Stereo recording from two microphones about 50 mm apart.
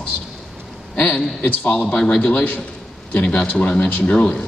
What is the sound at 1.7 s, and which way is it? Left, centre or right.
Speech, centre.